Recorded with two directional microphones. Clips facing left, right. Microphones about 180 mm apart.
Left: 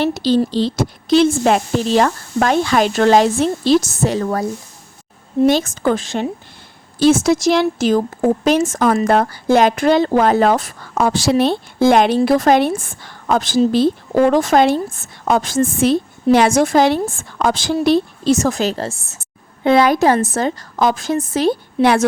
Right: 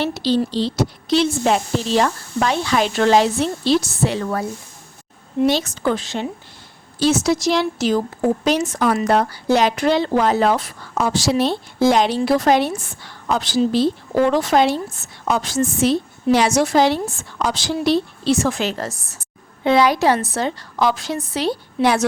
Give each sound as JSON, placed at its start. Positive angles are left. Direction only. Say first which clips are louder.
{"t": 0.0, "sound": "a woman's voice", "louder": "left 4 dB", "side_deg": 45}
{"t": 19.6, "sound": "a woman's voice", "louder": "left 3 dB", "side_deg": 50}